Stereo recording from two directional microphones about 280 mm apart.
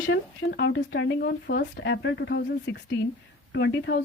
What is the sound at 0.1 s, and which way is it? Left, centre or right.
Speech, left.